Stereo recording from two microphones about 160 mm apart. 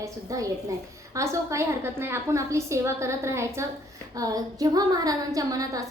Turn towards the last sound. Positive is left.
turn(degrees=-20)  # may be behind; listen again after turning